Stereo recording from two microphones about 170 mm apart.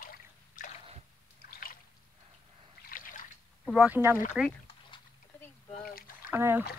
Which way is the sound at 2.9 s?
55° left (ahead or behind).